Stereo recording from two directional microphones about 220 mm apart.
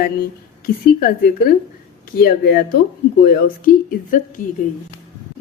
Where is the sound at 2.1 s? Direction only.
45° left (ahead or behind).